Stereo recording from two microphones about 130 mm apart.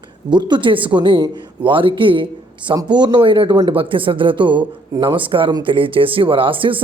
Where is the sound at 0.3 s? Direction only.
35° right (ahead or behind).